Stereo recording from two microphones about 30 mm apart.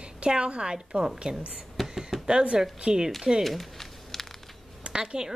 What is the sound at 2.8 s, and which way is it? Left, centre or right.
Speech, right.